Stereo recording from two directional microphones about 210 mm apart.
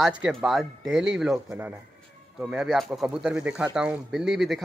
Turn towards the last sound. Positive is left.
turn(degrees=0)  # may be behind; listen again after turning